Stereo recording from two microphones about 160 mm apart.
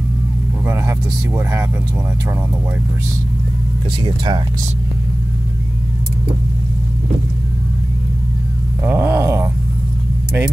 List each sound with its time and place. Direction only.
0.7 s speech: 15° right (ahead or behind)
4.0 s speech: 30° right (ahead or behind)
8.8 s a sound: 15° right (ahead or behind)